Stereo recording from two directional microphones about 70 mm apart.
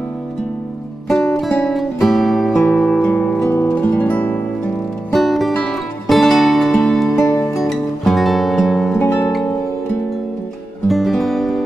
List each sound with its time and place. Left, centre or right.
1.0 s music: centre
2.8 s music: centre
5.1 s music: centre
7.2 s music: left
7.5 s music: centre
10.9 s music: centre